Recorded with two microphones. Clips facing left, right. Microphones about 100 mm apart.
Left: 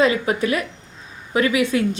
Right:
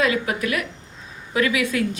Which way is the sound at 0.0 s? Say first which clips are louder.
Left 4 dB; 25° left (ahead or behind).